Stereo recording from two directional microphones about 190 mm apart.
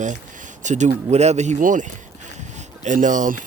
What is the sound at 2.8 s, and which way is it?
Speech, 40° right (ahead or behind).